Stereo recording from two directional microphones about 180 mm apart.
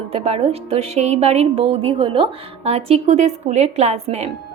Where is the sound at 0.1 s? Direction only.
35° right (ahead or behind).